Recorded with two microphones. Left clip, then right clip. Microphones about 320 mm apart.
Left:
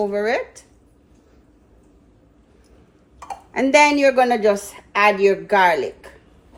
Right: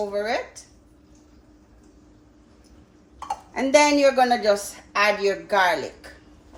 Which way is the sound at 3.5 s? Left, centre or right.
Left.